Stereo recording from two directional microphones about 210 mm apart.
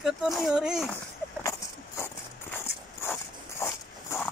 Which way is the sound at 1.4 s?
15° left (ahead or behind).